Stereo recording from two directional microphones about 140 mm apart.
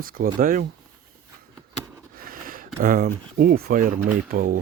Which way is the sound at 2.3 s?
90° right.